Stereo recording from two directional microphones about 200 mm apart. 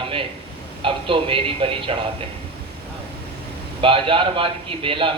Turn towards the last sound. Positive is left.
turn(degrees=-25)  # may be behind; listen again after turning